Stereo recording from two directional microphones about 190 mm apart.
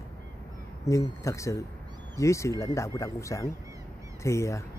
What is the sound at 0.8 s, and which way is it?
Speech, 15° left (ahead or behind).